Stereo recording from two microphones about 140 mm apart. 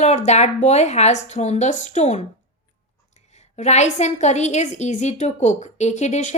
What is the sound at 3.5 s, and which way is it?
A woman's voice, 55° left (ahead or behind).